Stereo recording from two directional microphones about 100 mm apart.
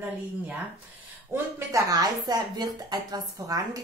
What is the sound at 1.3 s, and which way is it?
A woman's voice, 35° right (ahead or behind).